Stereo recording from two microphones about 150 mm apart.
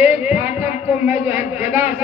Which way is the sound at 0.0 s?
10° right (ahead or behind).